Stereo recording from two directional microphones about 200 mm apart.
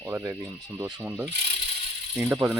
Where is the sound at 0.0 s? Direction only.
10° right (ahead or behind).